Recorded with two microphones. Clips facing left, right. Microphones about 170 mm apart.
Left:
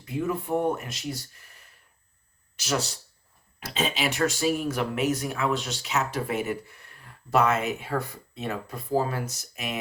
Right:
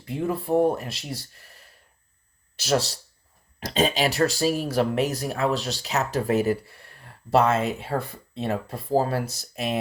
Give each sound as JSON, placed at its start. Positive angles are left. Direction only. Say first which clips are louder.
{"t": 0.2, "sound": "speech", "louder": "right 4 dB", "side_deg": -35}